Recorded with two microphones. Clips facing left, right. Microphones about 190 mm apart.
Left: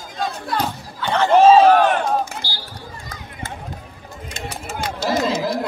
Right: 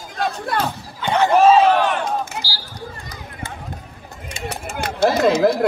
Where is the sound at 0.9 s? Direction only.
20° right (ahead or behind).